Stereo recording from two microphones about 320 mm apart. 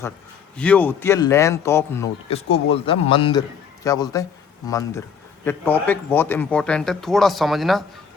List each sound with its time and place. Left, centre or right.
0.5 s speech: centre